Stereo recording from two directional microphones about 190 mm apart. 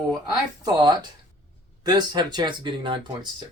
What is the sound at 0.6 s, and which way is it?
Speech, 20° right (ahead or behind).